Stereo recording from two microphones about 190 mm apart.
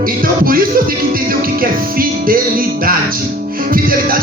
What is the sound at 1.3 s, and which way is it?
Music, 50° right (ahead or behind).